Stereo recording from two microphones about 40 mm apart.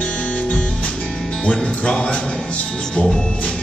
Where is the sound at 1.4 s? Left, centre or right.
Left.